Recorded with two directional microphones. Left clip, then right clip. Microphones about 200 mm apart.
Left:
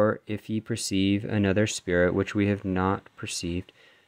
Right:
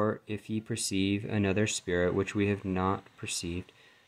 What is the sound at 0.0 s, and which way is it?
Speech, 35° left (ahead or behind).